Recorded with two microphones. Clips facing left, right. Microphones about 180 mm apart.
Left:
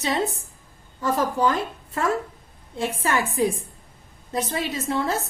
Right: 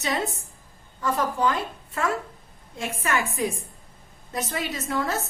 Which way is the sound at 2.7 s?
30° left (ahead or behind).